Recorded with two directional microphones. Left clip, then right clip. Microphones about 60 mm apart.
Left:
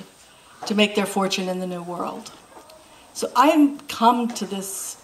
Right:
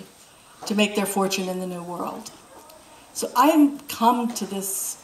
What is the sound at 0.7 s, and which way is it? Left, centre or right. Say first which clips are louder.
A woman's voice: left 2 dB; left.